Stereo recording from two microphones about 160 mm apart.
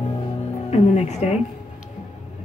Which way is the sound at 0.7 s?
45° left (ahead or behind).